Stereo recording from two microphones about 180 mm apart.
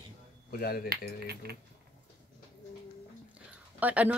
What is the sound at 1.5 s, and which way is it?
Speech, 60° right (ahead or behind).